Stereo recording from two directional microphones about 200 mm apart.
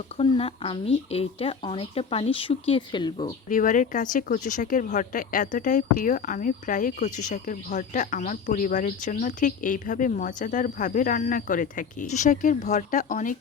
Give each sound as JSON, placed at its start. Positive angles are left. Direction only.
{"t": 0.2, "sound": "speech", "side_deg": 30}
{"t": 3.5, "sound": "speech", "side_deg": 40}